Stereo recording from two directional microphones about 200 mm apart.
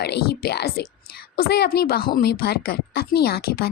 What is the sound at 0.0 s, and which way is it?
Whispering, 55° left (ahead or behind).